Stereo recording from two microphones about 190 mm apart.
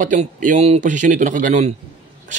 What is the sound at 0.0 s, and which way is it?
A man's voice, 45° right (ahead or behind).